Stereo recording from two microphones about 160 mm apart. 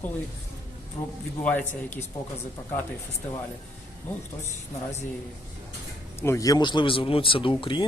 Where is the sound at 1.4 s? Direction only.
10° left (ahead or behind).